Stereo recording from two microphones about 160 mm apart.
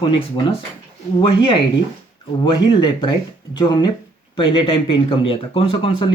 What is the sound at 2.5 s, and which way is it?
Speech, 25° left (ahead or behind).